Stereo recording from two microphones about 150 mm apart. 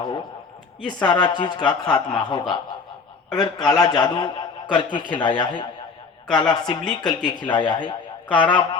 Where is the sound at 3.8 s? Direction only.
25° left (ahead or behind).